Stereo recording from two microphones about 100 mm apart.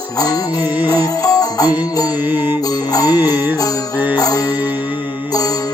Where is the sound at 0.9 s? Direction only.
40° left (ahead or behind).